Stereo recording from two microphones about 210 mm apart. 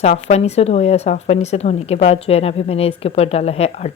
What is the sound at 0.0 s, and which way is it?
Speech, 30° left (ahead or behind).